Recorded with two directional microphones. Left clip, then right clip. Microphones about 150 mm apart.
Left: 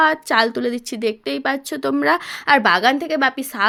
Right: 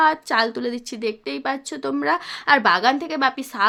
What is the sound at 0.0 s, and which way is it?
Speech, 25° left (ahead or behind).